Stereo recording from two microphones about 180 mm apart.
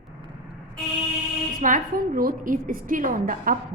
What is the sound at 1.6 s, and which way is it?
A woman's voice, 50° right (ahead or behind).